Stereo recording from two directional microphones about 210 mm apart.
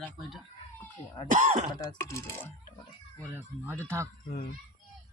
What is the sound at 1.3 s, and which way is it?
Speech, 35° right (ahead or behind).